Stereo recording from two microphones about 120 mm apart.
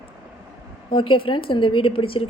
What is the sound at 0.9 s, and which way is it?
A woman's voice, 45° left (ahead or behind).